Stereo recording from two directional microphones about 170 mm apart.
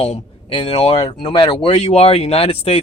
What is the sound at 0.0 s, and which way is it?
Speech, 35° left (ahead or behind).